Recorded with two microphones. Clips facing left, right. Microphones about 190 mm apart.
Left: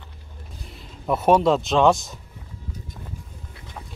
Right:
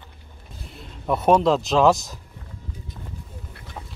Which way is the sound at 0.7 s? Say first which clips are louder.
Even; centre (ahead or behind).